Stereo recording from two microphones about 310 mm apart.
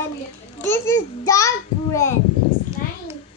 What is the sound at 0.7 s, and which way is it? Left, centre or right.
Child singing, centre.